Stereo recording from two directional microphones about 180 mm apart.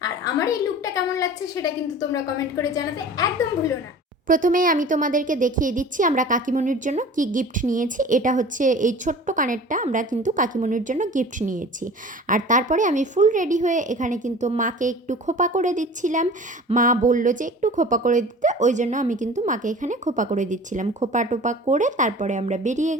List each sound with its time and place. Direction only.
0.0 s a woman's voice: 20° left (ahead or behind)
4.3 s a woman's voice: 50° right (ahead or behind)